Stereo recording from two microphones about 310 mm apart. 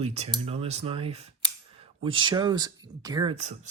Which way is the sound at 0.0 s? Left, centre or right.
Centre.